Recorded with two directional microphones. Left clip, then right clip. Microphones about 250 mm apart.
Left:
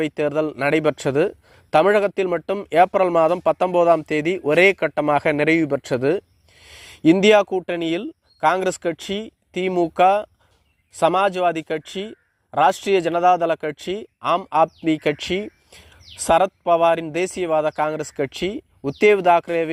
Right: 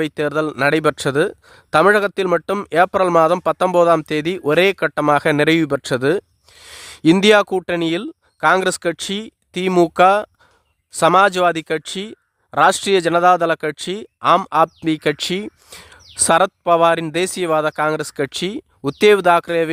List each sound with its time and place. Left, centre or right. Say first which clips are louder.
0.0 s speech: right 2 dB; centre